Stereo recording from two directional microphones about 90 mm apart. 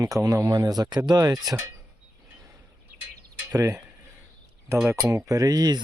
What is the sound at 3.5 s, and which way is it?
Speech, 35° right (ahead or behind).